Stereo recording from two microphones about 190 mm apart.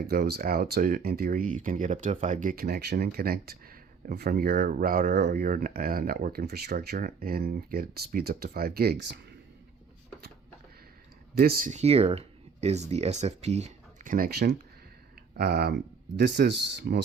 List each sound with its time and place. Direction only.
0.1 s speech: 55° right (ahead or behind)
11.3 s speech: 50° right (ahead or behind)